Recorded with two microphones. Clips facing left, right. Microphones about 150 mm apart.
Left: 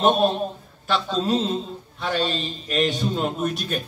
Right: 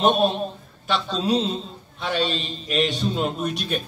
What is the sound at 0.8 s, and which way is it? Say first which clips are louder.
A man's voice: left 1 dB; centre (ahead or behind).